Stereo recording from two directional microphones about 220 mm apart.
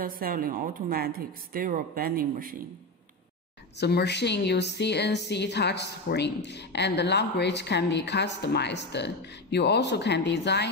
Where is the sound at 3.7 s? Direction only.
50° left (ahead or behind).